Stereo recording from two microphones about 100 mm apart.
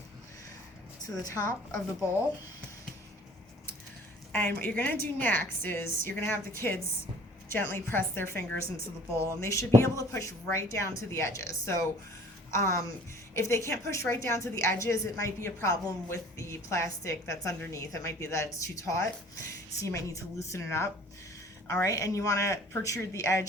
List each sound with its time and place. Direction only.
1.2 s speech: 35° left (ahead or behind)
4.3 s a woman's voice: 15° left (ahead or behind); by 23.5 s 35° left (ahead or behind)